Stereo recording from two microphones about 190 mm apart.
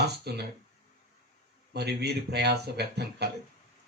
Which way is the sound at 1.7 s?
60° right (ahead or behind).